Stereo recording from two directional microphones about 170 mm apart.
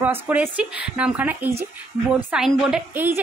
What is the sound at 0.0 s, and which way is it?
A woman's voice, 10° right (ahead or behind).